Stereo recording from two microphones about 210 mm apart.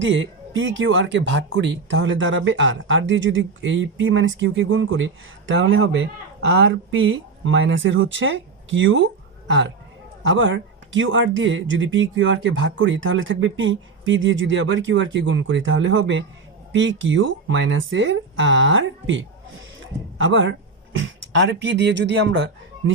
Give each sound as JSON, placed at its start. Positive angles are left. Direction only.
{"t": 0.0, "sound": "speech", "side_deg": -60}